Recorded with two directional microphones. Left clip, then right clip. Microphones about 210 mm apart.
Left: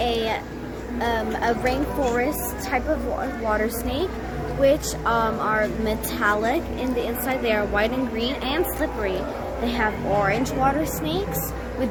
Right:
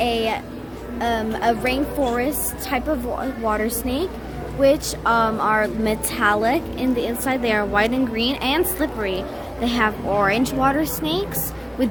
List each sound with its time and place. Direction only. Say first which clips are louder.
0.0 s a sound: right 2 dB; 40° right (ahead or behind)
0.9 s a woman's voice: right 2 dB; 45° right (ahead or behind)
11.8 s owl: right 4 dB; 45° right (ahead or behind)